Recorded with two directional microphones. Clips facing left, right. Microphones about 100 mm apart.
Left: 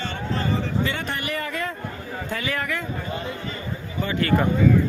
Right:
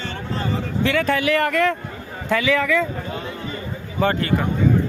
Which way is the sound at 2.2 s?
90° right.